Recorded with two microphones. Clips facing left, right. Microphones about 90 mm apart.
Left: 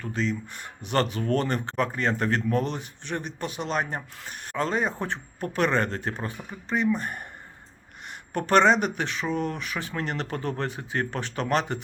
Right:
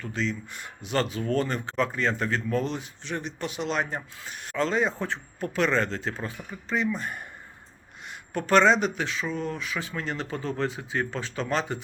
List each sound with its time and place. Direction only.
0.0 s speech: 40° left (ahead or behind)
0.9 s speech: 55° left (ahead or behind)
8.3 s speech: 50° left (ahead or behind)